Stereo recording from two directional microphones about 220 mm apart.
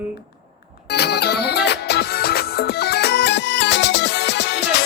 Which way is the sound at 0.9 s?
50° left (ahead or behind).